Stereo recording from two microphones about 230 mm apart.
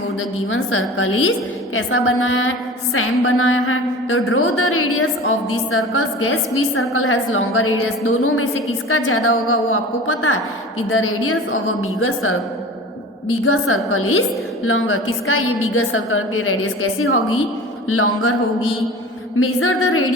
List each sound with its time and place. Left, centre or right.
0.5 s a woman's voice: left
13.4 s a woman's voice: left
19.4 s a woman's voice: left